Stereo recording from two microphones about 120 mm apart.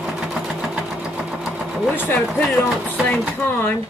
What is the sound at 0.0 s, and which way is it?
Sewing machine, 5° right (ahead or behind).